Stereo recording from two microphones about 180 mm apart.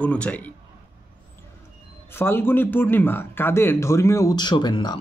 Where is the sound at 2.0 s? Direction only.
15° left (ahead or behind).